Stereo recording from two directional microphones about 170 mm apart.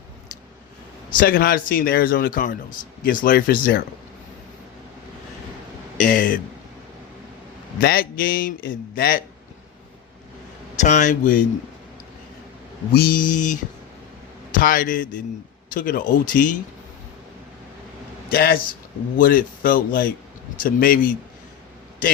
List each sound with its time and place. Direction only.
1.1 s speech: 60° left (ahead or behind)
6.0 s speech: 55° left (ahead or behind)
7.8 s speech: 60° left (ahead or behind)
10.8 s speech: 45° left (ahead or behind)
12.9 s speech: 60° left (ahead or behind)
14.6 s speech: 55° left (ahead or behind)
18.3 s speech: 65° left (ahead or behind)